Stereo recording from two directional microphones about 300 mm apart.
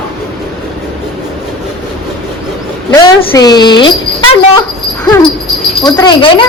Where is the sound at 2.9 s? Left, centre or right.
Centre.